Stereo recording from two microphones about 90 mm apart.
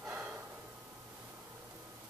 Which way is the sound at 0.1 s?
15° right (ahead or behind).